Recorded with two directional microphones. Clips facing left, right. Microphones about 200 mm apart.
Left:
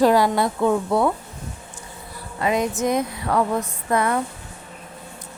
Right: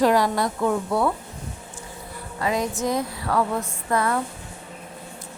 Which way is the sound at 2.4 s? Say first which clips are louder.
Left 3 dB; 20° left (ahead or behind).